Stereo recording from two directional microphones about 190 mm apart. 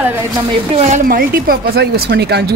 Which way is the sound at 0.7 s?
40° right (ahead or behind).